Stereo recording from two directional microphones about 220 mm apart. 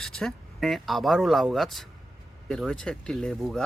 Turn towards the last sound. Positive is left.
turn(degrees=0)  # may be behind; listen again after turning